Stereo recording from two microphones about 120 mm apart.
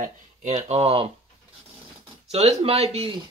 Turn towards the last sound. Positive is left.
turn(degrees=-60)  # may be behind; listen again after turning